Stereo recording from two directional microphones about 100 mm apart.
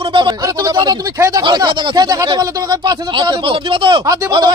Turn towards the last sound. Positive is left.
turn(degrees=-35)  # may be behind; listen again after turning